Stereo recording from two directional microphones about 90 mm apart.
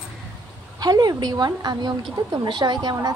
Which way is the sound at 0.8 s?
50° right (ahead or behind).